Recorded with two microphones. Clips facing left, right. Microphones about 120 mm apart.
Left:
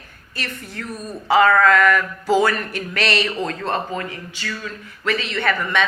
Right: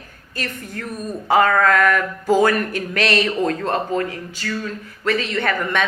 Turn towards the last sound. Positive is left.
turn(degrees=-45)  # may be behind; listen again after turning